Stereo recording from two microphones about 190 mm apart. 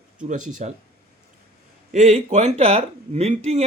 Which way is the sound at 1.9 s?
40° right (ahead or behind).